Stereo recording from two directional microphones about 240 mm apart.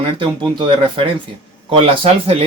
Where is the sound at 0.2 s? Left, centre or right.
Right.